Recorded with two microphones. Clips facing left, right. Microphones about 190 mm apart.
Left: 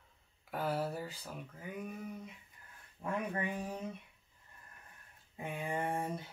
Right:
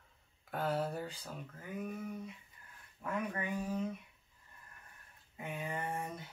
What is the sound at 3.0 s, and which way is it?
Speech, 25° left (ahead or behind).